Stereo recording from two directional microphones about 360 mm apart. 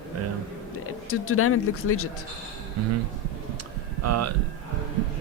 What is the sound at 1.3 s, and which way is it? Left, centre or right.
Speech, left.